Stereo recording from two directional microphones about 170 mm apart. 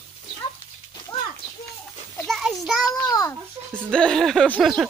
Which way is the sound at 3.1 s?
15° left (ahead or behind).